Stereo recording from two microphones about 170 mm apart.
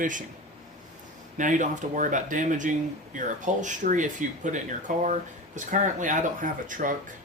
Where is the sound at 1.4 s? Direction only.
50° right (ahead or behind).